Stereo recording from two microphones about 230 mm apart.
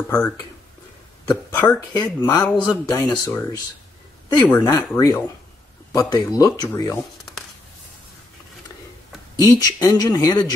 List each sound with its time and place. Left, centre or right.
1.5 s a man's voice: centre
9.4 s speech: centre